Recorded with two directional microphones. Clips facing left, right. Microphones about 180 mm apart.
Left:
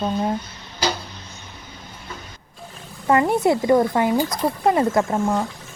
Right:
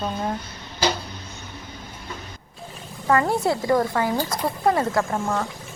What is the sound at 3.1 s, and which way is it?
Speech, 20° left (ahead or behind).